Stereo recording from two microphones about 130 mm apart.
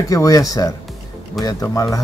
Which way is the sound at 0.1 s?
25° left (ahead or behind).